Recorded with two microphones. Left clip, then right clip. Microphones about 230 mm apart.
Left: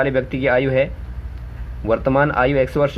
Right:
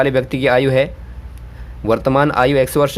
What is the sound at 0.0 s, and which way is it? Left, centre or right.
Speech, right.